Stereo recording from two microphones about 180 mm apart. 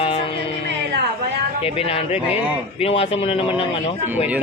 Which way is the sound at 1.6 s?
30° left (ahead or behind).